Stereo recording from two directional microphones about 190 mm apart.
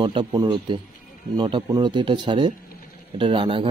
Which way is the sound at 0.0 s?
25° right (ahead or behind).